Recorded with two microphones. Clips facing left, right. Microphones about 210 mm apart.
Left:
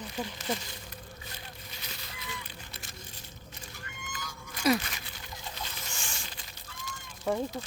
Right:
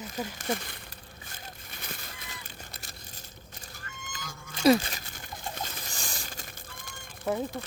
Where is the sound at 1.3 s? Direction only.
50° right (ahead or behind).